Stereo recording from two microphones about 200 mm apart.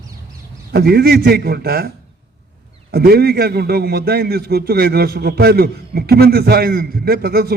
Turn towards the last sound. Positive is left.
turn(degrees=-50)  # may be behind; listen again after turning